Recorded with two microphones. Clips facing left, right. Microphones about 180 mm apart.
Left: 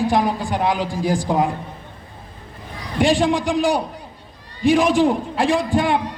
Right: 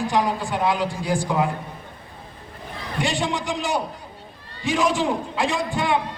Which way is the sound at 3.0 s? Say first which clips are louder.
Left 8 dB; 60° left (ahead or behind).